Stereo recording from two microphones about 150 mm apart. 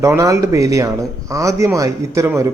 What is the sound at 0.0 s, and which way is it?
Speech, 20° right (ahead or behind).